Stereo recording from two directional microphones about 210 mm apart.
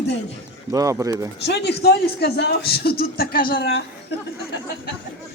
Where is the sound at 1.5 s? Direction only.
50° left (ahead or behind).